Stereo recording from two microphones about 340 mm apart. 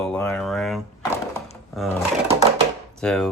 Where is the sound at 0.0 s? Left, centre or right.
Centre.